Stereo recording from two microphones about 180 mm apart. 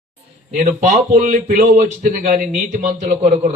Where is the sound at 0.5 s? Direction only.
40° right (ahead or behind).